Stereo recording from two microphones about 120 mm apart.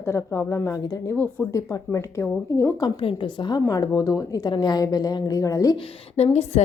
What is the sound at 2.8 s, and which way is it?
A woman's voice, 45° left (ahead or behind).